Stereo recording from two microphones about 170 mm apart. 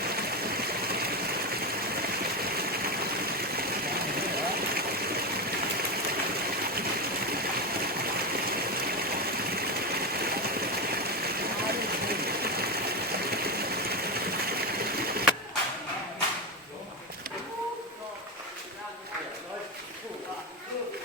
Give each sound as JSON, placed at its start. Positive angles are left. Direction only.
{"t": 0.0, "sound": "stream", "side_deg": -65}
{"t": 5.9, "sound": "a sound", "side_deg": -65}
{"t": 7.3, "sound": "stream", "side_deg": -65}